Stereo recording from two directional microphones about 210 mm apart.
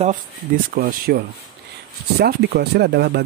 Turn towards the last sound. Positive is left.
turn(degrees=-50)  # may be behind; listen again after turning